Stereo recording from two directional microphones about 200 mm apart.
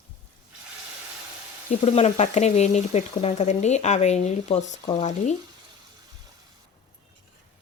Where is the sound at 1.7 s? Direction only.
30° left (ahead or behind).